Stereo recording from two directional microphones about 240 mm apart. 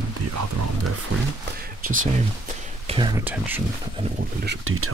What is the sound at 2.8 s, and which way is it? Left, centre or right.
Speech, right.